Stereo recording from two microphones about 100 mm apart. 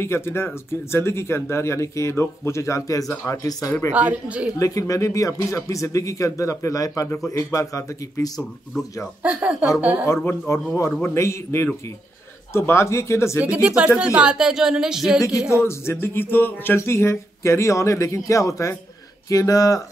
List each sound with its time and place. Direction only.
0.0 s speech: 25° left (ahead or behind)
3.9 s speech: 15° right (ahead or behind)
4.6 s speech: 35° left (ahead or behind)
9.2 s speech: 10° right (ahead or behind)
10.2 s speech: 20° left (ahead or behind)
13.4 s speech: 10° right (ahead or behind)
15.5 s speech: 25° left (ahead or behind)